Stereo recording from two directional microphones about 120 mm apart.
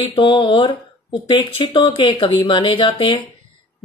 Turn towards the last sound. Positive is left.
turn(degrees=45)  # may be behind; listen again after turning